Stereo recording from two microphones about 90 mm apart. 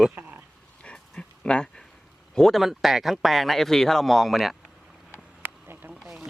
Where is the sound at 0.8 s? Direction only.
10° left (ahead or behind).